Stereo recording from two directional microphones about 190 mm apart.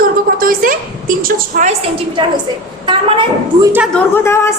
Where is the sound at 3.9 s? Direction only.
10° left (ahead or behind).